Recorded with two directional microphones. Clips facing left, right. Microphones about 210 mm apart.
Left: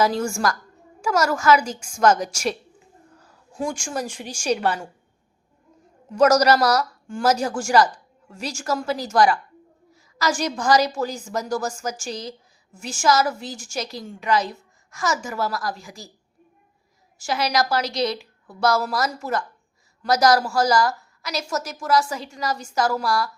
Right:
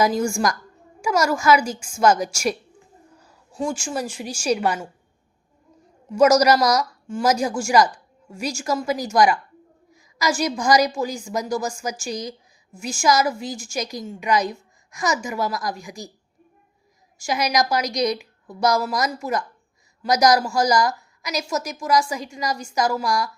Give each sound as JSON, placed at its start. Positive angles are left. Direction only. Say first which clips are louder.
{"t": 0.0, "sound": "a woman's voice", "louder": "right 1 dB", "side_deg": -15}
{"t": 3.2, "sound": "a sound", "louder": "even", "side_deg": -10}
{"t": 3.6, "sound": "a woman's voice", "louder": "right 1 dB", "side_deg": -5}
{"t": 6.1, "sound": "a woman's voice", "louder": "right 1 dB", "side_deg": -10}
{"t": 17.2, "sound": "a woman's voice", "louder": "right 1 dB", "side_deg": -15}